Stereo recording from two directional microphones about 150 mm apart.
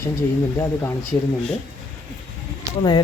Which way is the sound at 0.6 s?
15° left (ahead or behind).